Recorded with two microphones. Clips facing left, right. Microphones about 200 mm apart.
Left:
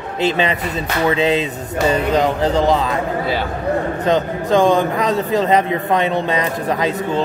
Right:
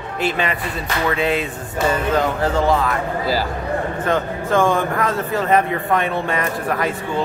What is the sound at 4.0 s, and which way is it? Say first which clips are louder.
A man's voice: left 3 dB; 20° left (ahead or behind).